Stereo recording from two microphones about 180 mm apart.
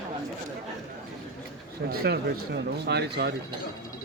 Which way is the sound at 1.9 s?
65° right (ahead or behind).